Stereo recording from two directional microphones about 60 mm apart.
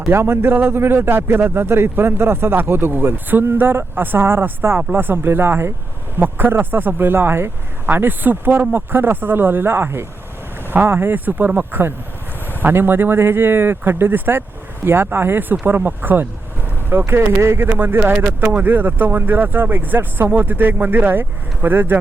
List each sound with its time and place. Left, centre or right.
0.1 s speech: right
11.7 s speech: right
18.0 s speech: right